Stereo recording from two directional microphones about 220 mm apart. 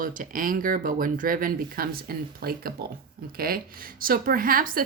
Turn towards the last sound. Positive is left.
turn(degrees=-40)  # may be behind; listen again after turning